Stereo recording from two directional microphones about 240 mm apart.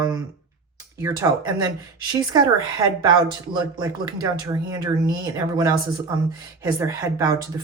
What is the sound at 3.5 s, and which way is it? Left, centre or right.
Speech, centre.